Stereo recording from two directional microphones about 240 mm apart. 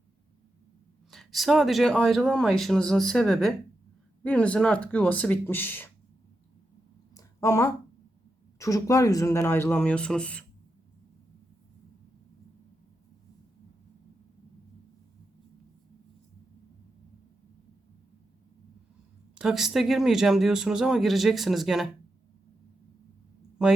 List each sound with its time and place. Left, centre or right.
1.1 s speech: centre
7.1 s a sound: centre
8.5 s speech: centre
19.4 s speech: centre